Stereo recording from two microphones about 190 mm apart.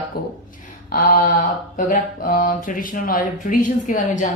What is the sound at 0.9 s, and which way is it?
Mantra, 45° left (ahead or behind).